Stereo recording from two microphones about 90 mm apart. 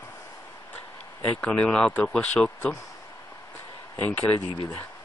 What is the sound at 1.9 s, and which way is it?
Speech, 15° left (ahead or behind).